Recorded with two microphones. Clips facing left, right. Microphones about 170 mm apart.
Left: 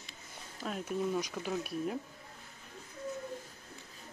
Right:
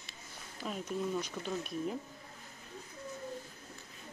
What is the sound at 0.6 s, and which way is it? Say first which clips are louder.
Speech: left 2 dB; 5° left (ahead or behind).